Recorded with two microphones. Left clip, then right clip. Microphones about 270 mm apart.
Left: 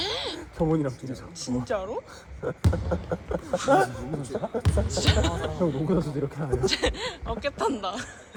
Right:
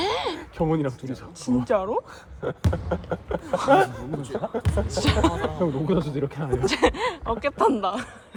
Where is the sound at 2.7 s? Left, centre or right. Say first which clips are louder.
Right 1 dB; right.